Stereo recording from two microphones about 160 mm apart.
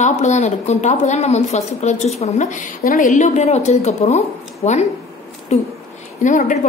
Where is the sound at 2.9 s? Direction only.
55° left (ahead or behind).